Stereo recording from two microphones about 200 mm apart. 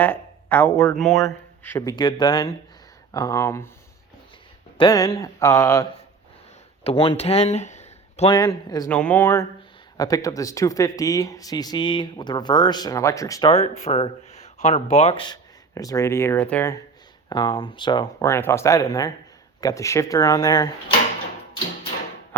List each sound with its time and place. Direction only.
0.0 s speech: 10° left (ahead or behind)
1.2 s speech: 15° left (ahead or behind)
4.8 s speech: 20° left (ahead or behind)
6.8 s speech: 30° left (ahead or behind)
8.4 s speech: 20° left (ahead or behind)
8.9 s speech: 5° left (ahead or behind)
13.5 s speech: 30° left (ahead or behind)